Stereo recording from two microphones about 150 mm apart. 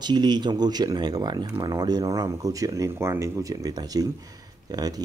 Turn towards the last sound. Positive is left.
turn(degrees=-25)  # may be behind; listen again after turning